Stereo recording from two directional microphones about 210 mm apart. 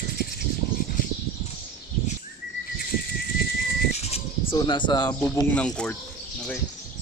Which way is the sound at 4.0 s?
30° left (ahead or behind).